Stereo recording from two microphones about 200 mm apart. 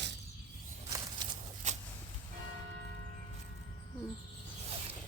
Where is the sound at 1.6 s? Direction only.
35° right (ahead or behind).